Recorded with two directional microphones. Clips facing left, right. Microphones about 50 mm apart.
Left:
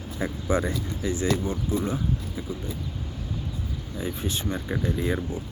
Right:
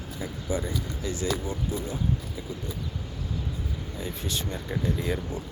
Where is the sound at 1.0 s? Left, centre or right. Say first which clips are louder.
Left 5 dB; left.